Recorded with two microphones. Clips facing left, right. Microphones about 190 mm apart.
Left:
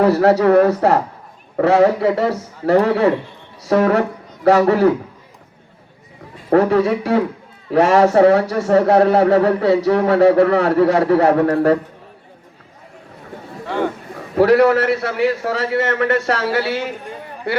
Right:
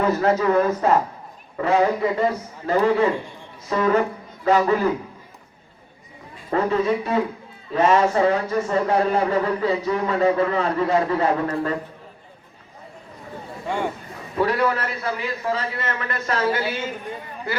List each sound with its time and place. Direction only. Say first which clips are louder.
0.0 s a man's voice: left 6 dB; 75° left (ahead or behind)
6.5 s speech: left 7 dB; 80° left
14.3 s a man's voice: left 9 dB; 75° left (ahead or behind)